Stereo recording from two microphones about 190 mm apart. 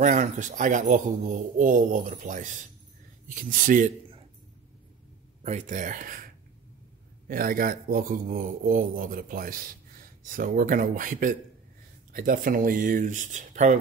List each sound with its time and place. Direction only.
0.0 s speech: 40° right (ahead or behind)
5.4 s speech: 35° right (ahead or behind)
7.2 s speech: 50° right (ahead or behind)